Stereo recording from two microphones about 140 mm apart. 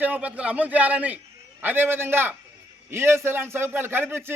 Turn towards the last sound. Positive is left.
turn(degrees=-15)  # may be behind; listen again after turning